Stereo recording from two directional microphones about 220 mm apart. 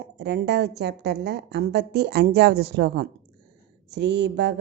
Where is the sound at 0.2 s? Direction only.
50° right (ahead or behind).